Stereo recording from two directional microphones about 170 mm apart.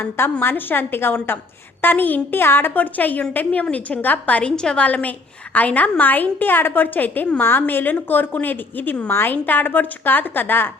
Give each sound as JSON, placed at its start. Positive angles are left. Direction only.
{"t": 0.0, "sound": "a woman's voice", "side_deg": 10}